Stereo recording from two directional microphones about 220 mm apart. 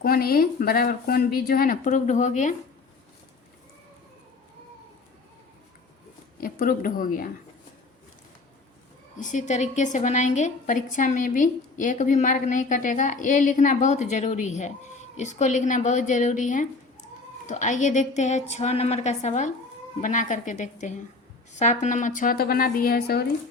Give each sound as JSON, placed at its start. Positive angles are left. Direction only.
{"t": 0.0, "sound": "a woman's voice", "side_deg": 45}
{"t": 6.4, "sound": "speech", "side_deg": 40}
{"t": 9.1, "sound": "a woman's voice", "side_deg": 35}